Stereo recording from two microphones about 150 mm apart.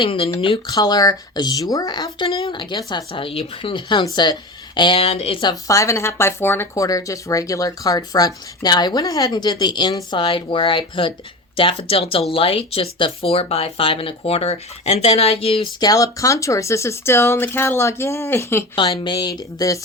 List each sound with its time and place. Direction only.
0.0 s speech: 35° left (ahead or behind)
0.7 s speech: 25° left (ahead or behind)
15.8 s speech: 25° left (ahead or behind)
18.8 s speech: 35° left (ahead or behind)